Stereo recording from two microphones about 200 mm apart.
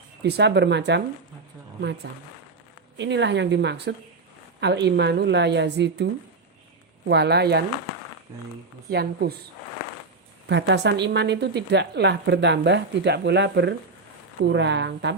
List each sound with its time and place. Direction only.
0.2 s speech: 55° right (ahead or behind)
3.0 s speech: 60° right (ahead or behind)
8.9 s speech: 50° right (ahead or behind)
10.5 s speech: 60° right (ahead or behind)